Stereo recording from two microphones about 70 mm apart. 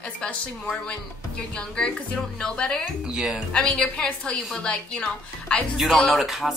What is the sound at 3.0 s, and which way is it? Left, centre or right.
Speech, centre.